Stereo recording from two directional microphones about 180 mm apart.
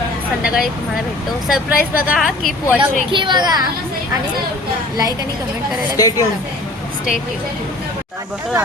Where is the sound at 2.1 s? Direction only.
Centre (ahead or behind).